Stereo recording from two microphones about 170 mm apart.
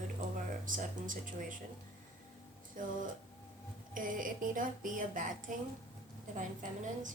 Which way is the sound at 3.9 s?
50° right (ahead or behind).